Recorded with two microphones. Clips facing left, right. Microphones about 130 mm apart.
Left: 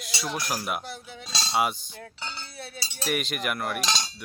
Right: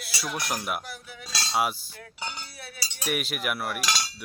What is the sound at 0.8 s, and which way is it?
Cutlery, 25° left (ahead or behind).